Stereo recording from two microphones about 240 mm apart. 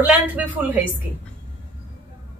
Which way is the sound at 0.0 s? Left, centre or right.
Centre.